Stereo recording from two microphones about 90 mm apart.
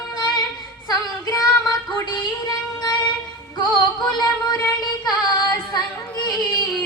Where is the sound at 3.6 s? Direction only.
55° left (ahead or behind).